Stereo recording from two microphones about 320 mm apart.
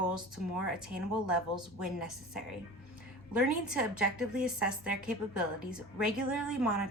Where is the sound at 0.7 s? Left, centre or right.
Centre.